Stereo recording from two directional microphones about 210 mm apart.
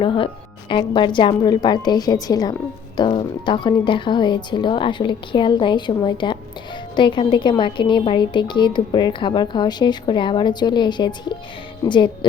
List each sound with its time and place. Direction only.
0.0 s speech: 25° left (ahead or behind)